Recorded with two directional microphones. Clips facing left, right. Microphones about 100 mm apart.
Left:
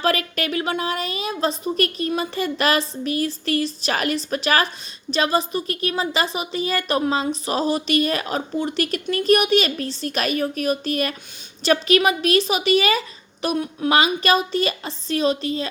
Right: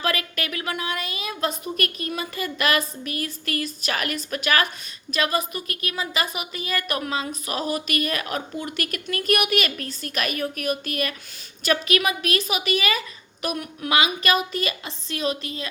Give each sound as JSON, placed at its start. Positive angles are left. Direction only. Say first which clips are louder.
{"t": 0.0, "sound": "a woman's voice", "louder": "left 5 dB", "side_deg": 35}